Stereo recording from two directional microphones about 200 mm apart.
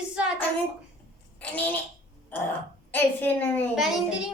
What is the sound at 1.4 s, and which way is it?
A woman's voice, 10° left (ahead or behind).